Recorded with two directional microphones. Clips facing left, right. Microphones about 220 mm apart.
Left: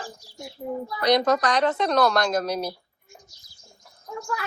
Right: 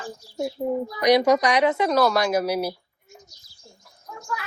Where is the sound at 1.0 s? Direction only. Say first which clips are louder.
Right 3 dB; 10° right (ahead or behind).